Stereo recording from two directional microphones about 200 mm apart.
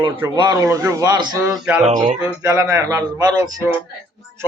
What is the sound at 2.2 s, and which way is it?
Speech, 15° right (ahead or behind).